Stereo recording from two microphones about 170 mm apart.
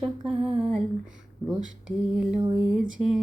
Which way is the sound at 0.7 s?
5° right (ahead or behind).